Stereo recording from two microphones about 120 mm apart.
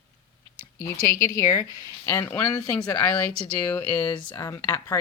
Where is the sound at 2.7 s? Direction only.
10° left (ahead or behind).